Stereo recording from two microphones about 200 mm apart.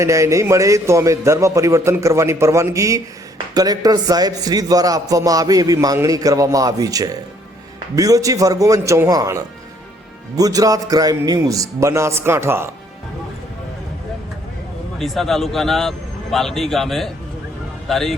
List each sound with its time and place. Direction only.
0.0 s a man's voice: 15° right (ahead or behind)
14.9 s a man's voice: centre (ahead or behind)